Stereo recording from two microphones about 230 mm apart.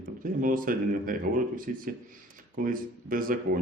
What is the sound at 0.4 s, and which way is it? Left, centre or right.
A man's voice, right.